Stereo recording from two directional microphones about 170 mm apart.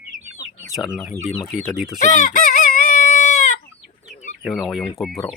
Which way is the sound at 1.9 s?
50° left (ahead or behind).